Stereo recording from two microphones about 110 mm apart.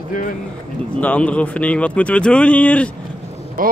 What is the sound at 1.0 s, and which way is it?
Speech, 10° left (ahead or behind).